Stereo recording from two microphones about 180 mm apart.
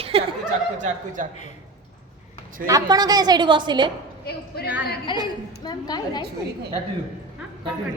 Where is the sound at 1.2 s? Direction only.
45° right (ahead or behind).